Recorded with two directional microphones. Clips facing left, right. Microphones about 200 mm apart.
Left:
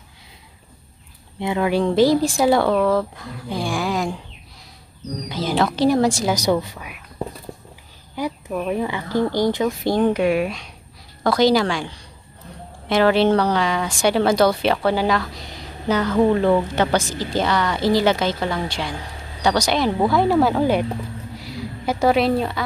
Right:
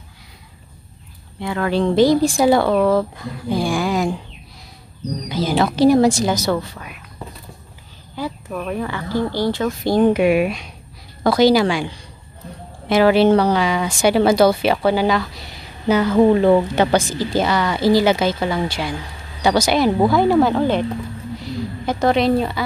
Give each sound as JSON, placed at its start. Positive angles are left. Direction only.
{"t": 1.4, "sound": "speech", "side_deg": 15}
{"t": 5.3, "sound": "speech", "side_deg": 0}
{"t": 6.3, "sound": "speech", "side_deg": 15}
{"t": 8.2, "sound": "speech", "side_deg": 15}
{"t": 9.8, "sound": "a woman's voice", "side_deg": -5}